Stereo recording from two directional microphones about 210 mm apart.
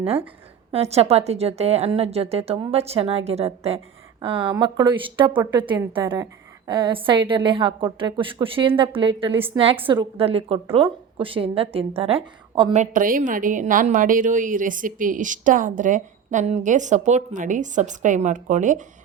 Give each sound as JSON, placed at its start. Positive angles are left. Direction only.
{"t": 0.0, "sound": "a woman's voice", "side_deg": -25}